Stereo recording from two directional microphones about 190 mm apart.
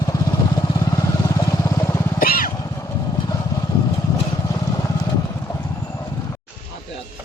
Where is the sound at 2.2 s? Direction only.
50° left (ahead or behind).